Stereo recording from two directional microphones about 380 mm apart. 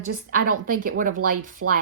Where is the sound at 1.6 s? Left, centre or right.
Right.